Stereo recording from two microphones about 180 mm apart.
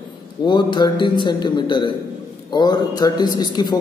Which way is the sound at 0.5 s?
25° left (ahead or behind).